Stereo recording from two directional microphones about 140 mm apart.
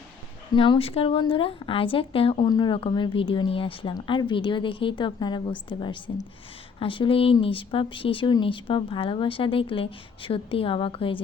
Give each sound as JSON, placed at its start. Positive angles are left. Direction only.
{"t": 0.5, "sound": "speech", "side_deg": 40}